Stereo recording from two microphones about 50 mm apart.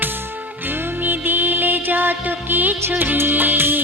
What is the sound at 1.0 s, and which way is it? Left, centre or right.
Music, right.